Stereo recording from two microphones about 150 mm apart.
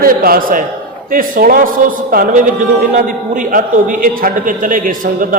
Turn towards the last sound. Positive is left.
turn(degrees=-65)  # may be behind; listen again after turning